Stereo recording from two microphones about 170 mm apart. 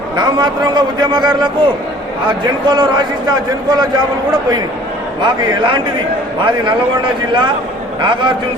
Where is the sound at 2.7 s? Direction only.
25° right (ahead or behind).